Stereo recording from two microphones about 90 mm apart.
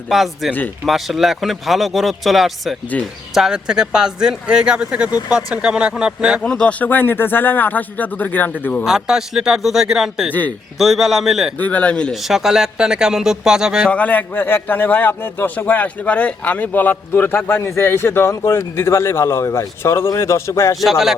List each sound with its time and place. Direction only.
0.1 s speech: centre (ahead or behind)
2.9 s a man's voice: 15° left (ahead or behind)
3.3 s speech: 5° right (ahead or behind)
6.4 s a man's voice: 10° left (ahead or behind)
8.8 s speech: 5° right (ahead or behind)
11.5 s a man's voice: 15° left (ahead or behind)
12.1 s speech: 5° right (ahead or behind)
13.9 s a man's voice: 15° left (ahead or behind); by 20.7 s 30° left (ahead or behind)